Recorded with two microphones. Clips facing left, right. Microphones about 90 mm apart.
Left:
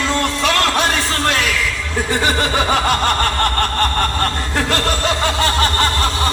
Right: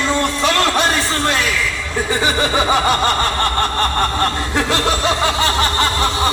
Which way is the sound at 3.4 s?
20° right (ahead or behind).